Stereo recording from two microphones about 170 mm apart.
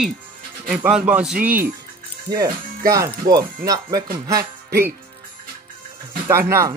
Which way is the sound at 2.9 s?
15° right (ahead or behind).